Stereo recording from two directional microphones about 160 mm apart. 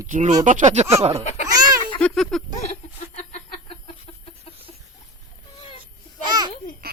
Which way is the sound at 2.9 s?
45° left (ahead or behind).